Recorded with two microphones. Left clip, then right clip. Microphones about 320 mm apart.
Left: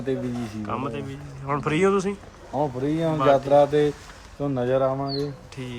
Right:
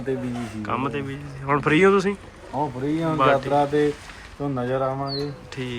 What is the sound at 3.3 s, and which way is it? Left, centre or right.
Speech, left.